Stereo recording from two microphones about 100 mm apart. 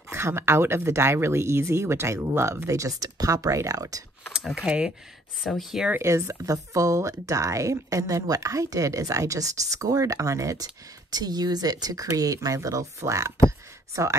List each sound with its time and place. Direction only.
0.1 s speech: 25° right (ahead or behind)
4.3 s speech: 5° right (ahead or behind)
5.9 s speech: 25° right (ahead or behind)